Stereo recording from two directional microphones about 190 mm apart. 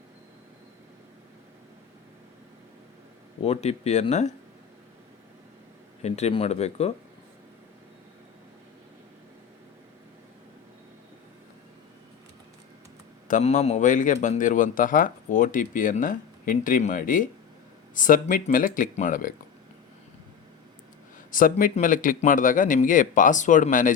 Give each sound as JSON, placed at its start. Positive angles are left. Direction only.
{"t": 3.4, "sound": "speech", "side_deg": 35}
{"t": 6.0, "sound": "speech", "side_deg": 35}
{"t": 13.2, "sound": "a man's voice", "side_deg": 40}
{"t": 21.2, "sound": "a man's voice", "side_deg": 45}